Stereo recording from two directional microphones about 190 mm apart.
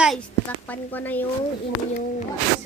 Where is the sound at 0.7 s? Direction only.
10° left (ahead or behind).